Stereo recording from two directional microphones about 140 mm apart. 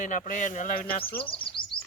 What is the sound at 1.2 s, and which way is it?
Chirp, 40° left (ahead or behind).